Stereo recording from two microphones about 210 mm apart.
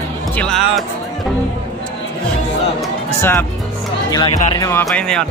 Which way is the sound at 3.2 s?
10° left (ahead or behind).